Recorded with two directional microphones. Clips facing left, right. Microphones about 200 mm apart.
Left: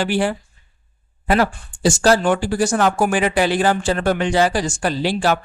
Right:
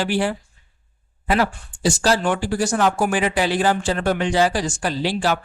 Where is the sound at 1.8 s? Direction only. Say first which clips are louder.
Left 4 dB; 50° left (ahead or behind).